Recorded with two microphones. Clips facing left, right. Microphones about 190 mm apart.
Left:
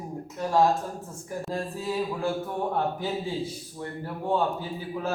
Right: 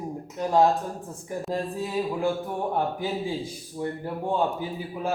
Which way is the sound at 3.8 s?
20° right (ahead or behind).